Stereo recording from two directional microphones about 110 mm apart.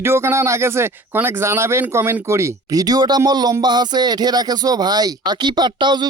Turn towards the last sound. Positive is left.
turn(degrees=-45)  # may be behind; listen again after turning